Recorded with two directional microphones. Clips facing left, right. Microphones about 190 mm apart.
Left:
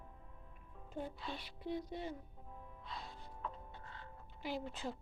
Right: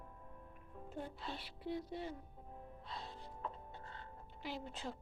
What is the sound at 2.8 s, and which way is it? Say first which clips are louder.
Music: even; 30° right (ahead or behind).